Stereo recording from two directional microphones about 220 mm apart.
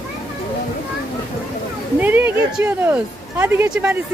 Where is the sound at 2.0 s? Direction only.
10° right (ahead or behind).